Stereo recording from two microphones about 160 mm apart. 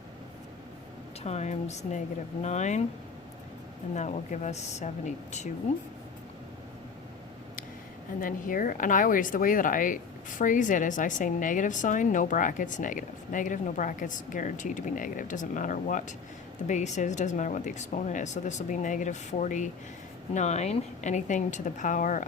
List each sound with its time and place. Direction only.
1.2 s a woman's voice: 45° left (ahead or behind)
3.9 s a woman's voice: 50° left (ahead or behind)
8.2 s a woman's voice: 60° left (ahead or behind)